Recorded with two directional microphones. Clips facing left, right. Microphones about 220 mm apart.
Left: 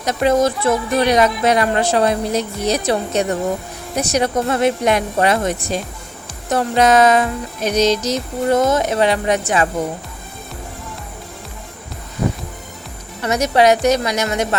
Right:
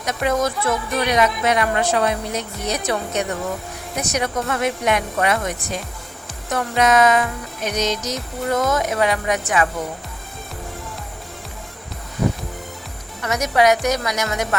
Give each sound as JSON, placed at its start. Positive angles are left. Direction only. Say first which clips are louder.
{"t": 0.0, "sound": "speech", "louder": "left 5 dB", "side_deg": 30}
{"t": 13.2, "sound": "speech", "louder": "left 3 dB", "side_deg": 30}